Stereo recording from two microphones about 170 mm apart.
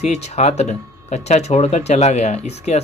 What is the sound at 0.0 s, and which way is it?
Speech, 40° left (ahead or behind).